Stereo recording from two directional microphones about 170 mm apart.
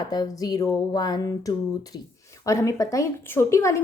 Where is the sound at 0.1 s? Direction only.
25° left (ahead or behind).